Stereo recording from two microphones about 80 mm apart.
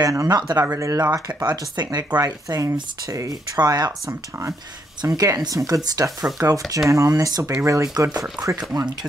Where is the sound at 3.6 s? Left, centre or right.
Right.